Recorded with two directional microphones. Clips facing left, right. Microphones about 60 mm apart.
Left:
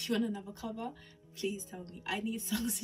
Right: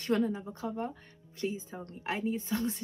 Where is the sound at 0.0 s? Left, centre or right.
Right.